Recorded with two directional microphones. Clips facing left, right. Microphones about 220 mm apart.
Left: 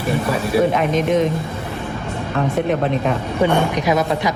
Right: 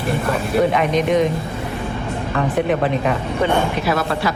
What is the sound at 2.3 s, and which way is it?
Speech, centre (ahead or behind).